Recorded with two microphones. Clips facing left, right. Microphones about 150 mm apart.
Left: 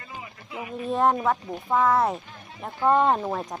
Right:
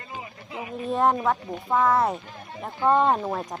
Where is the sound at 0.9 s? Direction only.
Centre (ahead or behind).